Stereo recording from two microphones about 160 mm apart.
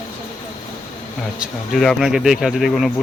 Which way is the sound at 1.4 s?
Centre (ahead or behind).